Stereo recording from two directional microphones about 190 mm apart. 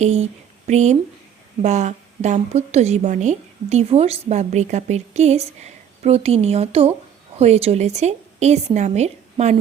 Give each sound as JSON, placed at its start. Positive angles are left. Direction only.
{"t": 0.0, "sound": "a woman's voice", "side_deg": -35}